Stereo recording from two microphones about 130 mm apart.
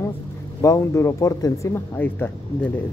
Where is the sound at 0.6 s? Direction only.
25° left (ahead or behind).